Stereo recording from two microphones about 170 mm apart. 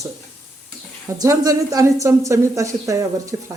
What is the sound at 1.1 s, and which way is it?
Speech, 20° right (ahead or behind).